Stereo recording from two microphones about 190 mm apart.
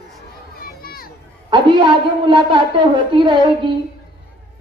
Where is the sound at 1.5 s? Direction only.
25° right (ahead or behind).